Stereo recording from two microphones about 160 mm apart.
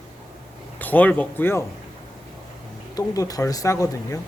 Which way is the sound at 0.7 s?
10° left (ahead or behind).